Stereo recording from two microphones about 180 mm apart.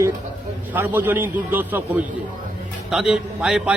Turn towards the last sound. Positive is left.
turn(degrees=-5)  # may be behind; listen again after turning